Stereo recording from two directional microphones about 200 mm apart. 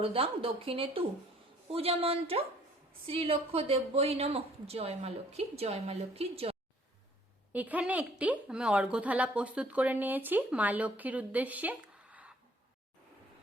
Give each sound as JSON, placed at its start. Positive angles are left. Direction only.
{"t": 0.0, "sound": "a woman's voice", "side_deg": -30}
{"t": 7.5, "sound": "a woman's voice", "side_deg": -5}